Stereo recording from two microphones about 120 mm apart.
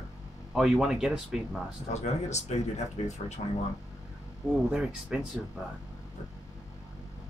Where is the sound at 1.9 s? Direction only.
70° left (ahead or behind).